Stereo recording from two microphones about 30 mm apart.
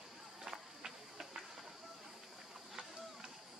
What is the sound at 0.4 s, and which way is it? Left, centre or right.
Run, centre.